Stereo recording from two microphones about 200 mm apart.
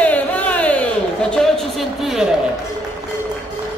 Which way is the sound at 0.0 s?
10° left (ahead or behind).